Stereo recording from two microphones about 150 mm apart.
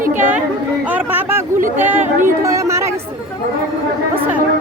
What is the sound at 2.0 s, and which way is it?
Speech, 55° right (ahead or behind).